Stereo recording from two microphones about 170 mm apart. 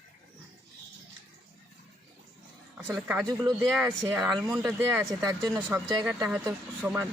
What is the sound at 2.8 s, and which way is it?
Speech, 10° right (ahead or behind).